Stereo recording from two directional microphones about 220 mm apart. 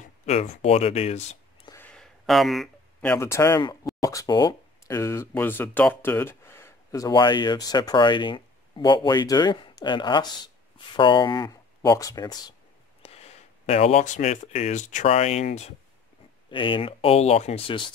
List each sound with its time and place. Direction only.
0.2 s speech: 30° left (ahead or behind)
1.7 s a sound: 5° left (ahead or behind)
3.1 s speech: 10° left (ahead or behind)
13.0 s speech: 30° left (ahead or behind)